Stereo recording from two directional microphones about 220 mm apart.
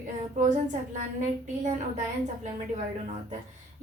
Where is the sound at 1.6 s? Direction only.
35° right (ahead or behind).